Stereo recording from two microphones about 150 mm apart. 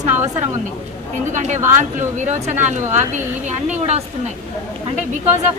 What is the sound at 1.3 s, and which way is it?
A woman's voice, 55° right (ahead or behind).